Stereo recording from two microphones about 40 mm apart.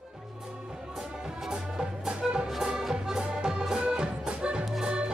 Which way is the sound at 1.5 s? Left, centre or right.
Right.